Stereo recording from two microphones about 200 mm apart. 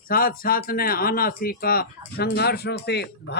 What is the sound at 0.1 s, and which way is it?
Speech, 45° left (ahead or behind).